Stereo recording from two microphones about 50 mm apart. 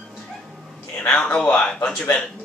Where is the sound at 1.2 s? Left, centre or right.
Left.